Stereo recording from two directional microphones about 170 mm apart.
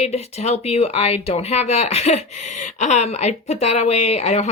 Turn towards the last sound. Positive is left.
turn(degrees=40)  # may be behind; listen again after turning